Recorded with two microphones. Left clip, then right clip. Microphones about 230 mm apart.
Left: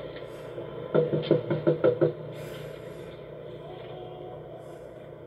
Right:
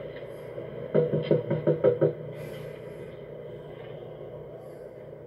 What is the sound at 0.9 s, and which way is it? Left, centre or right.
Music, left.